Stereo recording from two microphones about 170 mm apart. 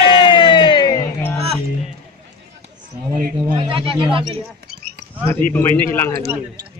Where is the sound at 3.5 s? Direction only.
30° right (ahead or behind).